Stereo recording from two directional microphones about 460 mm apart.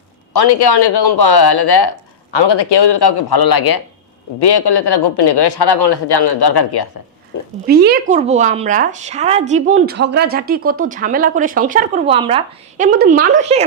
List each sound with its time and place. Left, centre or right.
0.3 s speech: left
7.3 s a sound: left
7.7 s speech: right